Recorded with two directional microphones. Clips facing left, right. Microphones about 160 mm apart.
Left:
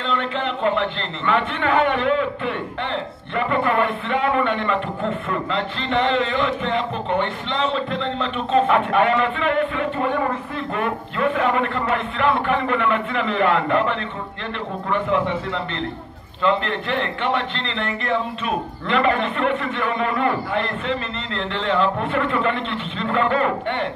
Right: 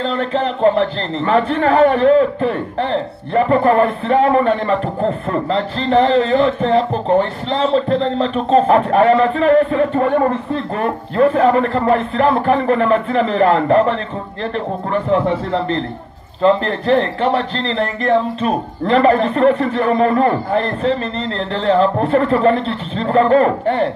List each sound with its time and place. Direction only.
0.0 s a man's voice: 40° right (ahead or behind)